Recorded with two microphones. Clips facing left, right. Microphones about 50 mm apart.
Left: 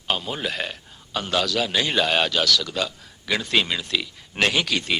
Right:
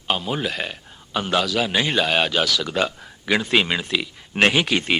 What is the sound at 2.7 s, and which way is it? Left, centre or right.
A man's voice, right.